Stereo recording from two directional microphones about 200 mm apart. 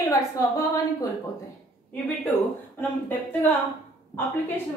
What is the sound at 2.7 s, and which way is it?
A woman's voice, 10° left (ahead or behind).